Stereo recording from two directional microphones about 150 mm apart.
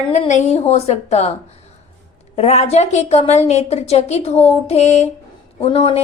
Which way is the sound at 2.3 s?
50° left (ahead or behind).